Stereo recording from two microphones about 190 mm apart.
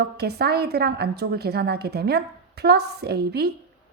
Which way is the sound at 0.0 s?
55° right (ahead or behind).